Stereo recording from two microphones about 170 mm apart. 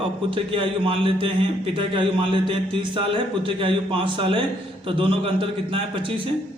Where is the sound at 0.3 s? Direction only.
30° right (ahead or behind).